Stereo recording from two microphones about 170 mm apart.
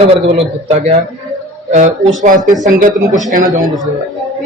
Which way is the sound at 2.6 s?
50° right (ahead or behind).